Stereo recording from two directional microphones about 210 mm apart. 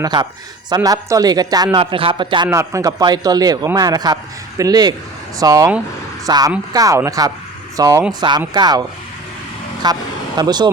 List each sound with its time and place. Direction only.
0.0 s a man's voice: 20° right (ahead or behind)
9.8 s speech: 20° right (ahead or behind)